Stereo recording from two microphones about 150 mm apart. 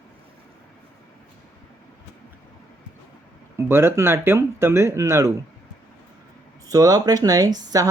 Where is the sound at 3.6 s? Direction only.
15° right (ahead or behind).